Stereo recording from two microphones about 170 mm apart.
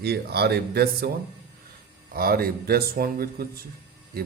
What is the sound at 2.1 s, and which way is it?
Speech, 60° right (ahead or behind).